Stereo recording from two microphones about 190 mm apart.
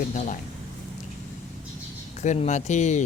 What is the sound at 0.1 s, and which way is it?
Speech, 40° left (ahead or behind).